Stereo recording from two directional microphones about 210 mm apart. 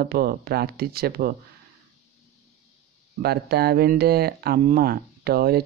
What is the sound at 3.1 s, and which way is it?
Speech, 50° right (ahead or behind).